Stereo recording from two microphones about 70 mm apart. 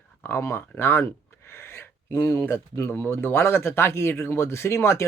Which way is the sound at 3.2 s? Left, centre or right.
Left.